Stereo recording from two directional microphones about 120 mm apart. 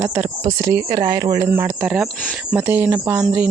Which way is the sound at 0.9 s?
35° right (ahead or behind).